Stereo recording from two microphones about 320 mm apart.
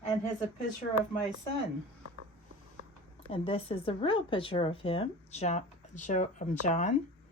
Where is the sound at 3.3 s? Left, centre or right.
Centre.